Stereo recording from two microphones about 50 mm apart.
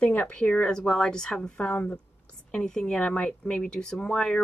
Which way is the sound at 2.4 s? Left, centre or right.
Centre.